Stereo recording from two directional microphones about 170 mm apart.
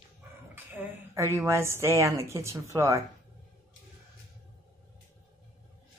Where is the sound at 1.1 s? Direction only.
15° right (ahead or behind).